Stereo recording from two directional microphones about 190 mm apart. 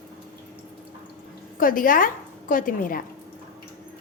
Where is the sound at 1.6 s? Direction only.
45° left (ahead or behind).